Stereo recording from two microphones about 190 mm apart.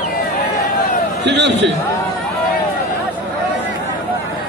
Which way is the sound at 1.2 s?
65° right (ahead or behind).